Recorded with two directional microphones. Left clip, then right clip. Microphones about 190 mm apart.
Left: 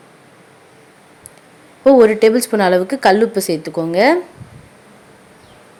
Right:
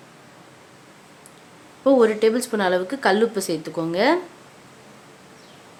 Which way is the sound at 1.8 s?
25° left (ahead or behind).